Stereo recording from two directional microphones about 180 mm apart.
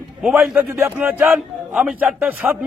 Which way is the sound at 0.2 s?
5° right (ahead or behind).